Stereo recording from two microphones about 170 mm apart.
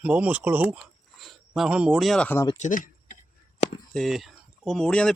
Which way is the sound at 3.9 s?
Centre (ahead or behind).